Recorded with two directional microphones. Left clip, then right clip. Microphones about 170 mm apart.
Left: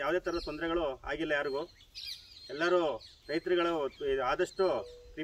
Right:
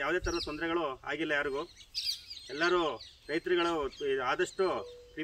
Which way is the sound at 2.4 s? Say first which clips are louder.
Even; 10° left (ahead or behind).